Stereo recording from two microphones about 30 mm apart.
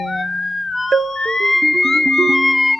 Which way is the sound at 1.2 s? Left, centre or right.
Left.